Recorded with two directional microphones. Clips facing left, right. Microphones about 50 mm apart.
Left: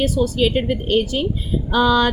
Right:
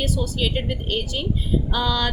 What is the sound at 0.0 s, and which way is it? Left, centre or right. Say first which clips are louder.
A woman's voice: left 7 dB; left.